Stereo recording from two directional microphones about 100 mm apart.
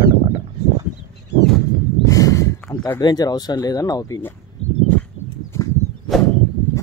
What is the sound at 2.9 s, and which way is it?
Speech, 40° left (ahead or behind).